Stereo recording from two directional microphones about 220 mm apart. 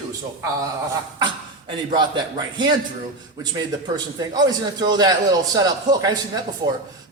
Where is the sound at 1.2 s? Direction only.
20° right (ahead or behind).